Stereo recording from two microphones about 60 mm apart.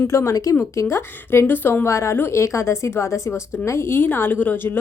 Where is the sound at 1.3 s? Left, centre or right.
Left.